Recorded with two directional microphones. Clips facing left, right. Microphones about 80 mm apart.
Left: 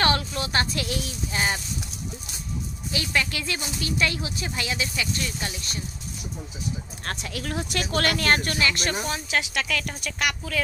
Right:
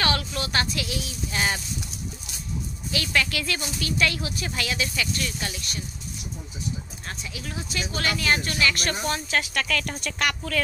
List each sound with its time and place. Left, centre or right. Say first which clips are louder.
0.0 s a sound: left 2 dB; left
0.4 s speech: left 1 dB; left
0.7 s a woman's voice: left 2 dB; left
1.3 s speech: even; centre
3.1 s speech: right 1 dB; left
7.1 s speech: left 6 dB; left
8.5 s speech: even; left
8.9 s speech: right 1 dB; centre